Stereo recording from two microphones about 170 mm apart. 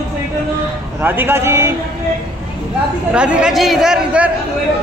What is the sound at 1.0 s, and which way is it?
Speech, 10° right (ahead or behind).